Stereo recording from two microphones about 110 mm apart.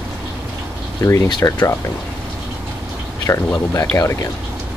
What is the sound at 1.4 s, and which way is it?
Speech, 30° left (ahead or behind).